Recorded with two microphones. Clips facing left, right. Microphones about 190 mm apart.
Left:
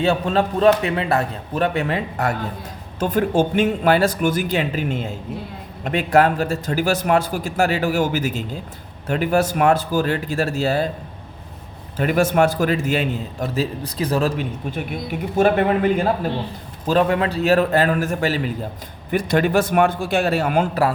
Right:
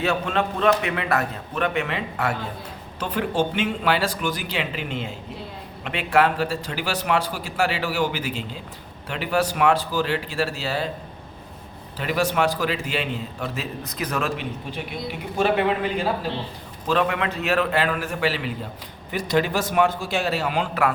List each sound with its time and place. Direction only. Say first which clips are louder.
0.0 s a man's voice: left 5 dB; 35° left (ahead or behind)
11.9 s speech: left 6 dB; 50° left (ahead or behind)
15.0 s speech: left 5 dB; 50° left (ahead or behind)
16.8 s a man's voice: left 5 dB; 40° left (ahead or behind)
19.1 s speech: left 5 dB; 55° left (ahead or behind)